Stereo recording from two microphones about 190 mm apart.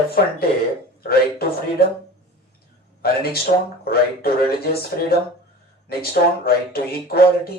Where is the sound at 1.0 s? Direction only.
55° left (ahead or behind).